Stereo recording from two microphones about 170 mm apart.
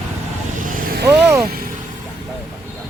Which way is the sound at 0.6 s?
65° right (ahead or behind).